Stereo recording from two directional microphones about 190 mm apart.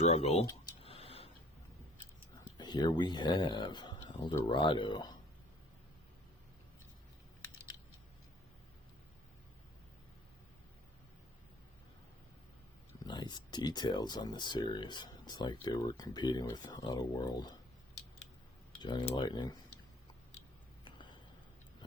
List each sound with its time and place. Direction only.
0.0 s speech: 35° left (ahead or behind)
0.8 s a sound: 30° left (ahead or behind)
2.6 s speech: 20° left (ahead or behind)
13.1 s speech: 25° left (ahead or behind)
18.8 s speech: 25° left (ahead or behind)